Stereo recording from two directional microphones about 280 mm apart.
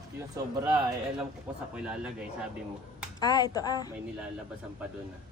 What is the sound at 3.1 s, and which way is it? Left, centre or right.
Speech, centre.